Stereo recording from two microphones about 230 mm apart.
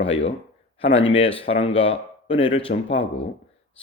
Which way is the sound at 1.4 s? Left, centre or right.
Left.